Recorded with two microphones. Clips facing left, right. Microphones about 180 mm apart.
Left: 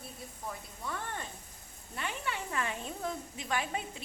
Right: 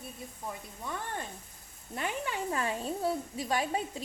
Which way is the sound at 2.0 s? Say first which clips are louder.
Right 4 dB; 40° right (ahead or behind).